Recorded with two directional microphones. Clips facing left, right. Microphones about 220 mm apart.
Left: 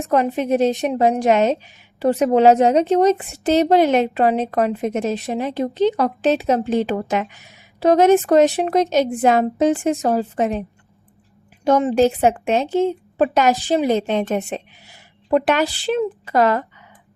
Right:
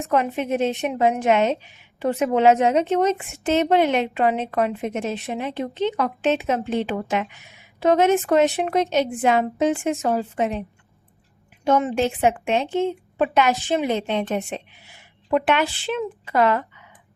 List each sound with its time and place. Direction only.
0.1 s a woman's voice: 35° left (ahead or behind)
11.6 s a woman's voice: 35° left (ahead or behind)